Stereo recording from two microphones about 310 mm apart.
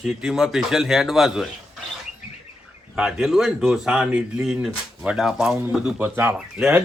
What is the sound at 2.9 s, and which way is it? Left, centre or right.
A man's voice, centre.